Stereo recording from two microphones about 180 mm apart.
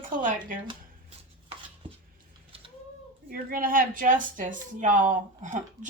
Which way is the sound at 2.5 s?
30° right (ahead or behind).